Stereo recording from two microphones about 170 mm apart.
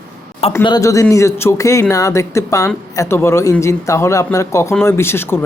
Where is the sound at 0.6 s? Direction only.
20° left (ahead or behind).